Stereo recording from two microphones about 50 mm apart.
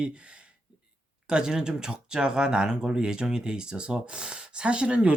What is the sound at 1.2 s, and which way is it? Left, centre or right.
Speech, centre.